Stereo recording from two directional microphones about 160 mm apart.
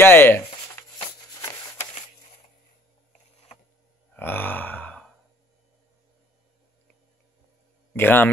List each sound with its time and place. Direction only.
0.0 s speech: 15° left (ahead or behind)
4.1 s grunt: 10° left (ahead or behind)
7.9 s a man's voice: 10° left (ahead or behind)